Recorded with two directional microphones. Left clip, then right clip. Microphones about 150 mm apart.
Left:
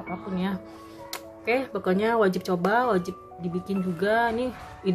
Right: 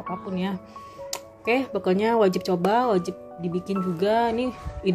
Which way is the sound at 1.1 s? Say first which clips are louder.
Right 2 dB; 25° right (ahead or behind).